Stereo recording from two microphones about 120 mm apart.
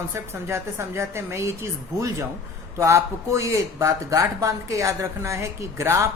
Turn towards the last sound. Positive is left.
turn(degrees=-25)  # may be behind; listen again after turning